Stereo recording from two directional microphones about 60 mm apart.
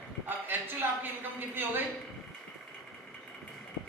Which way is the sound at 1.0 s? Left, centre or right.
Right.